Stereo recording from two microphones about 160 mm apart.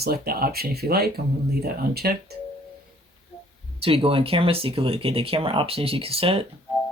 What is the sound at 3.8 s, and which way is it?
Speech, 35° right (ahead or behind).